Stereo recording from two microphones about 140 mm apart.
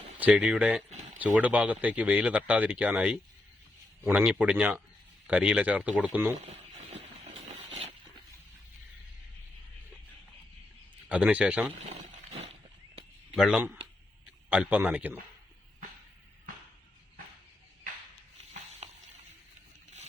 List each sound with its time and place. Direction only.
0.2 s speech: 10° right (ahead or behind)
6.3 s a sound: 50° right (ahead or behind)
11.1 s speech: 10° right (ahead or behind)
13.3 s speech: centre (ahead or behind)